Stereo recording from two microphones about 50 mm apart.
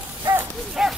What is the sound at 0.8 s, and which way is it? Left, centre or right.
Dog, centre.